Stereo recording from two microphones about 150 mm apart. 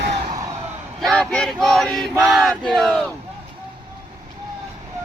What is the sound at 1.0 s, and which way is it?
Chant, 5° left (ahead or behind).